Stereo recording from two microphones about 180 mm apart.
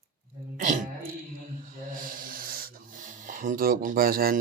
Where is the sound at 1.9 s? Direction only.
50° right (ahead or behind).